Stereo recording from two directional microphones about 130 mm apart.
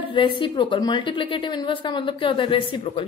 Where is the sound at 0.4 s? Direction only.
40° left (ahead or behind).